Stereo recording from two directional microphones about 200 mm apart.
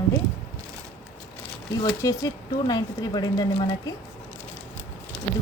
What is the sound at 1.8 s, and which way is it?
Speech, 15° left (ahead or behind).